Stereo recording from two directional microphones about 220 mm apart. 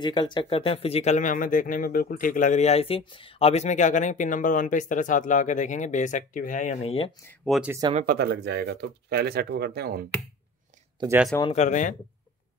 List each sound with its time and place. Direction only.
0.0 s speech: 20° left (ahead or behind)
7.2 s speech: centre (ahead or behind)
7.9 s speech: 40° right (ahead or behind)
11.0 s speech: 10° right (ahead or behind)
11.5 s speech: 35° left (ahead or behind)